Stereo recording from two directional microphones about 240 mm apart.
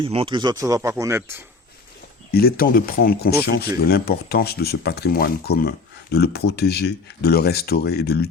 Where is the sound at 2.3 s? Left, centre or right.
Left.